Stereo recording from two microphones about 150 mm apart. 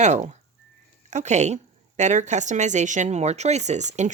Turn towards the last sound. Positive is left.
turn(degrees=-50)  # may be behind; listen again after turning